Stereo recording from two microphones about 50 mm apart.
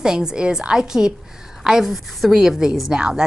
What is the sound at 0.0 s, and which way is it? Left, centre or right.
Speech, centre.